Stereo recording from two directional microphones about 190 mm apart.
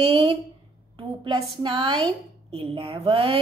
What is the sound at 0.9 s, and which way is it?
A woman's voice, 25° right (ahead or behind).